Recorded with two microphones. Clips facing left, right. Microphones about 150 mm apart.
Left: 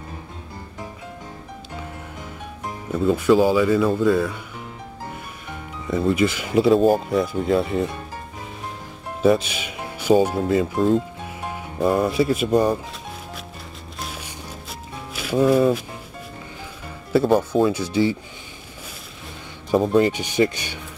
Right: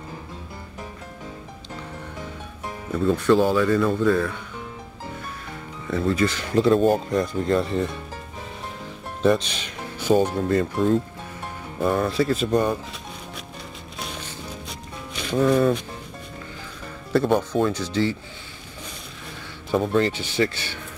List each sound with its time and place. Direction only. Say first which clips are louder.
2.9 s speech: left 2 dB; 5° left (ahead or behind)
5.9 s speech: left 2 dB; 15° left (ahead or behind)
9.2 s speech: left 2 dB; 5° left (ahead or behind)
13.9 s music: even; centre (ahead or behind)
17.1 s speech: left 3 dB; 5° left (ahead or behind)
19.9 s speech: left 4 dB; 15° left (ahead or behind)